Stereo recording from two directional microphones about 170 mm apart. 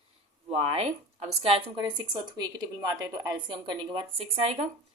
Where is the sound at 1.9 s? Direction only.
25° right (ahead or behind).